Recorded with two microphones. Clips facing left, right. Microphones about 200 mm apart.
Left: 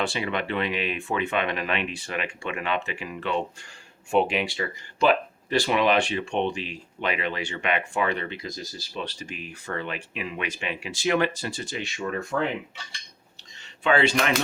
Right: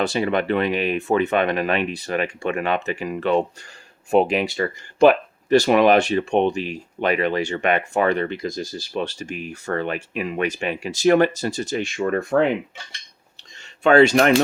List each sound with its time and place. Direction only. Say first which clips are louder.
0.0 s speech: right 7 dB; 40° right (ahead or behind)
11.9 s speech: right 8 dB; 60° right (ahead or behind)
13.8 s speech: right 8 dB; 45° right (ahead or behind)